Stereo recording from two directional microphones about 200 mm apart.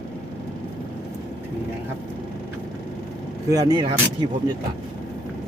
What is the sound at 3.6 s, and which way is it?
Speech, 20° right (ahead or behind).